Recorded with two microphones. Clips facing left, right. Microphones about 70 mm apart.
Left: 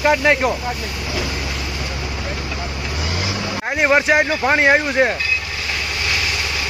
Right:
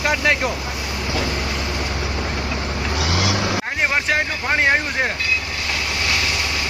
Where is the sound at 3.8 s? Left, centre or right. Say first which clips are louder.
Left 7 dB; centre.